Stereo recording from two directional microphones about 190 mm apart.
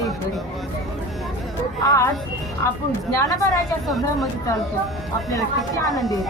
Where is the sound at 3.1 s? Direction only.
15° left (ahead or behind).